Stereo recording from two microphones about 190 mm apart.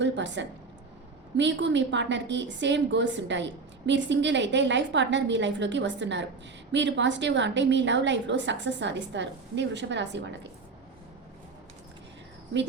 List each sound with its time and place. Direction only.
0.0 s a woman's voice: 70° right (ahead or behind)